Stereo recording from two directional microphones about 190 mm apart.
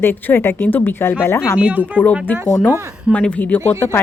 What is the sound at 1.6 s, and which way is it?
Speech, 5° right (ahead or behind).